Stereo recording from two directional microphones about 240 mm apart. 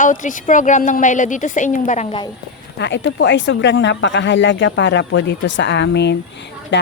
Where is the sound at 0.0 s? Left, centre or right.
Left.